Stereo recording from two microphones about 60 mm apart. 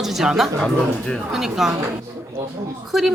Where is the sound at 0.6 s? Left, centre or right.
Centre.